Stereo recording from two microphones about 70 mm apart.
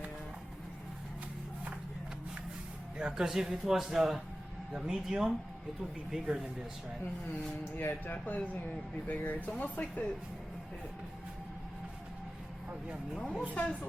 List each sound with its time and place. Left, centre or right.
3.0 s a man's voice: centre
7.8 s speech: left
13.1 s speech: centre